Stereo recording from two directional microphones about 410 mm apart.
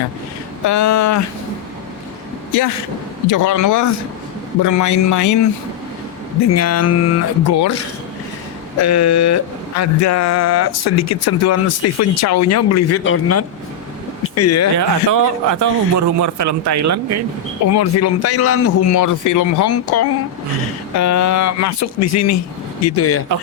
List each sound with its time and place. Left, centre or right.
0.7 s speech: left
2.5 s speech: left
6.5 s speech: left
8.8 s speech: left
14.8 s a man's voice: right
17.7 s speech: left